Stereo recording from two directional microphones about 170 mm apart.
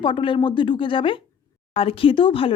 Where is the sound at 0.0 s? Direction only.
30° left (ahead or behind).